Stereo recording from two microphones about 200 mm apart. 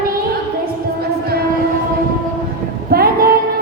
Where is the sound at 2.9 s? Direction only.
50° right (ahead or behind).